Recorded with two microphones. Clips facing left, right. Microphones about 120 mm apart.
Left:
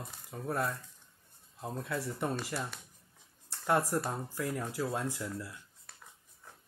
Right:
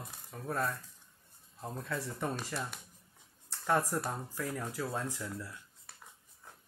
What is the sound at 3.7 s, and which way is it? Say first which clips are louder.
Speech: left 1 dB; 5° left (ahead or behind).